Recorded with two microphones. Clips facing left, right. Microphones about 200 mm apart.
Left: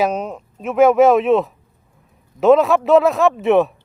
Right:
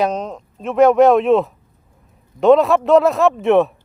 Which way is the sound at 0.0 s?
10° left (ahead or behind).